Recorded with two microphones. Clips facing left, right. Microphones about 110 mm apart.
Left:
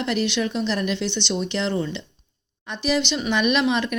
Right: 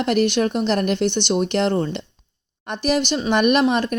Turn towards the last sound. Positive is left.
turn(degrees=-40)  # may be behind; listen again after turning